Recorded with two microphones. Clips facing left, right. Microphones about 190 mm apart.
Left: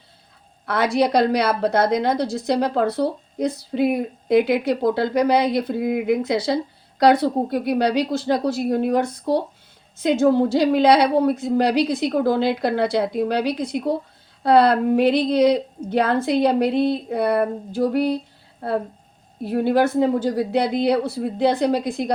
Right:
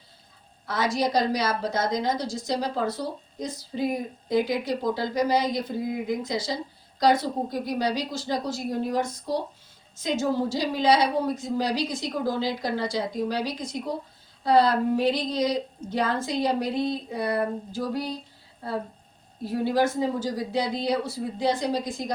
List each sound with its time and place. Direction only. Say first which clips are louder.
0.6 s a woman's voice: left 6 dB; 65° left (ahead or behind)